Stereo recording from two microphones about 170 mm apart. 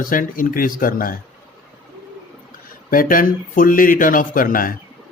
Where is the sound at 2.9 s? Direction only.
55° left (ahead or behind).